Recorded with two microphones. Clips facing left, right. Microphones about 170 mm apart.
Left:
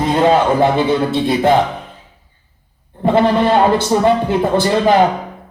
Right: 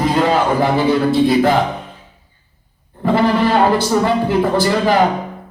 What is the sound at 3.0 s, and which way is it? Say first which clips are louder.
Speech: left 2 dB; 20° left (ahead or behind).